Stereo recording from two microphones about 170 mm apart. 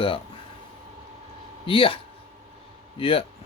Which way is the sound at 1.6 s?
30° left (ahead or behind).